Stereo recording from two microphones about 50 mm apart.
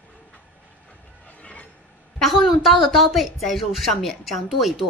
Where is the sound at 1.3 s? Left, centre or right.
Left.